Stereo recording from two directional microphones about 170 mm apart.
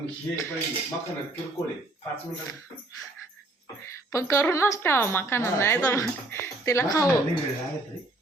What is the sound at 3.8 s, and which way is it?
A woman's voice, 15° left (ahead or behind).